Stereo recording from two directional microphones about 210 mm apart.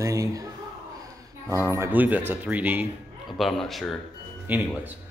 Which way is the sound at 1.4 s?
15° right (ahead or behind).